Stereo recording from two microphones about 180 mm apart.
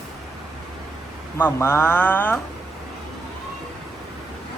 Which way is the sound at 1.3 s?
10° left (ahead or behind).